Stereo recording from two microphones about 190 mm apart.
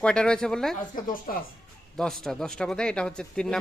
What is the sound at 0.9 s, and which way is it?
Speech, 50° left (ahead or behind).